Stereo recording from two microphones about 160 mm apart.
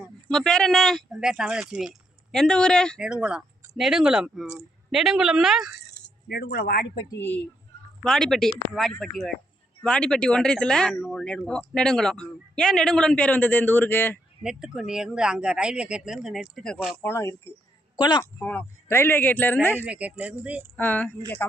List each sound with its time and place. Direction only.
0.3 s speech: 5° left (ahead or behind)
3.1 s speech: 5° right (ahead or behind)
6.2 s speech: 75° left (ahead or behind)
7.1 s speech: 10° left (ahead or behind)
14.4 s speech: 5° right (ahead or behind)
17.0 s speech: 15° left (ahead or behind)
17.9 s a woman's voice: 25° left (ahead or behind)
18.2 s speech: 10° left (ahead or behind)
19.8 s speech: 10° right (ahead or behind)
20.7 s speech: 10° left (ahead or behind)